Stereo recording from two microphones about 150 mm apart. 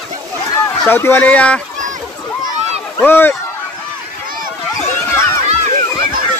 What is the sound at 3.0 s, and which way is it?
Speech, 15° left (ahead or behind).